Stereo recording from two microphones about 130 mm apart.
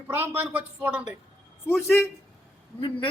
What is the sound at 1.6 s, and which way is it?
Speech, 15° left (ahead or behind).